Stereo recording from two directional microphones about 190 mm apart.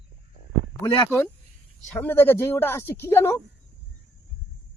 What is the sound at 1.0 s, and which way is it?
Speech, 10° left (ahead or behind).